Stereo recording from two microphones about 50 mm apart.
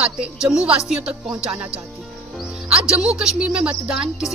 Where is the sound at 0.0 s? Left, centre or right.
Centre.